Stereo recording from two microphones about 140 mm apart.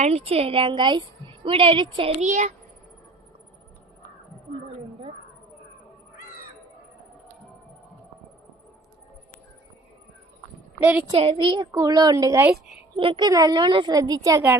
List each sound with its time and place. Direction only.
0.0 s a woman's voice: 45° right (ahead or behind)
2.2 s a child's voice: 55° right (ahead or behind)
11.1 s a woman's voice: 45° right (ahead or behind)
11.7 s a woman's voice: 25° right (ahead or behind)
13.0 s a woman's voice: 35° right (ahead or behind)